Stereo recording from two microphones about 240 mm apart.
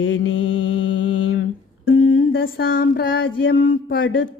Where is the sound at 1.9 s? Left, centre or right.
Left.